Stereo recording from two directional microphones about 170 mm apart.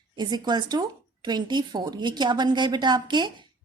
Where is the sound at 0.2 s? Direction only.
25° right (ahead or behind).